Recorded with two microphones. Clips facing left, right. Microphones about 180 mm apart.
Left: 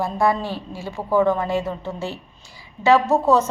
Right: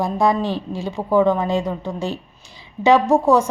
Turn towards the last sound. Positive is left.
turn(degrees=-10)  # may be behind; listen again after turning